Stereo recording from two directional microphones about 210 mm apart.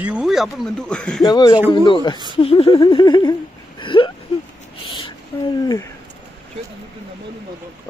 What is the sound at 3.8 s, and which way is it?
Whimper, 25° left (ahead or behind).